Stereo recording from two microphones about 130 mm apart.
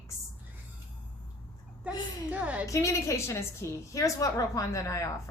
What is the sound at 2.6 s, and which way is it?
A woman's voice, 25° left (ahead or behind).